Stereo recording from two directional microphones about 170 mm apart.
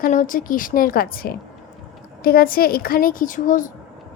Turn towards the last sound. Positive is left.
turn(degrees=50)  # may be behind; listen again after turning